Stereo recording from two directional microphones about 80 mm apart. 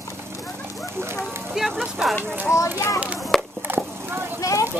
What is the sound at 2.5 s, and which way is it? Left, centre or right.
Speech, left.